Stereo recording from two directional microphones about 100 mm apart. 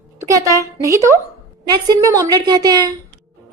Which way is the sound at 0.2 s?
35° right (ahead or behind).